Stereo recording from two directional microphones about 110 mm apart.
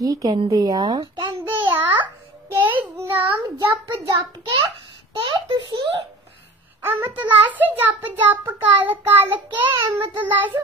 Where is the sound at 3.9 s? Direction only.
40° right (ahead or behind).